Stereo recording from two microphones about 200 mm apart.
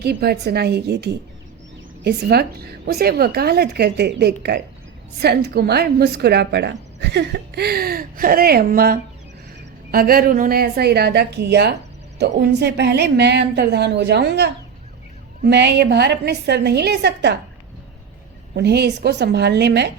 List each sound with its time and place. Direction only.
0.0 s a woman's voice: 55° right (ahead or behind)
18.5 s a woman's voice: 55° right (ahead or behind)